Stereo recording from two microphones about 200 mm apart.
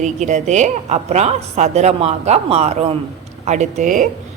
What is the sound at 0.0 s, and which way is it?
Speech, 35° right (ahead or behind).